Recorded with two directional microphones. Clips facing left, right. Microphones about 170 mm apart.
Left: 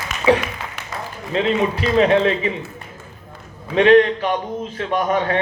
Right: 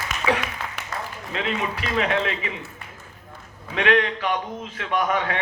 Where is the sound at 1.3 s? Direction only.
30° left (ahead or behind).